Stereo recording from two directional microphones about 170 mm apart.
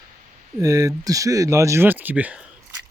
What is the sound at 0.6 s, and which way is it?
Speech, 20° right (ahead or behind).